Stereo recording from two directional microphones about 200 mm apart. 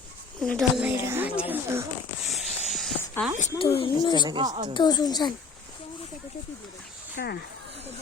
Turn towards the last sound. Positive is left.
turn(degrees=55)  # may be behind; listen again after turning